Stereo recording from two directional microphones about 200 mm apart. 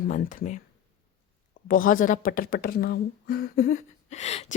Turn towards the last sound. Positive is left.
turn(degrees=30)  # may be behind; listen again after turning